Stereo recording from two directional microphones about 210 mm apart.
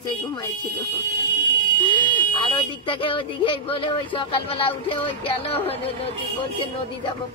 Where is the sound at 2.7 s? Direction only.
25° left (ahead or behind).